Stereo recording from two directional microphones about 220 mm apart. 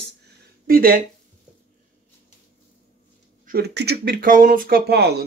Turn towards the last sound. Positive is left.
turn(degrees=-50)  # may be behind; listen again after turning